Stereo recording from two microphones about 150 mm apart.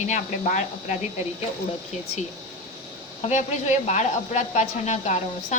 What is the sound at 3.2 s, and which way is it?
Speech, 50° left (ahead or behind).